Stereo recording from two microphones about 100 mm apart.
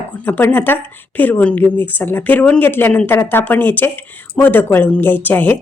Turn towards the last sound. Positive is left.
turn(degrees=20)  # may be behind; listen again after turning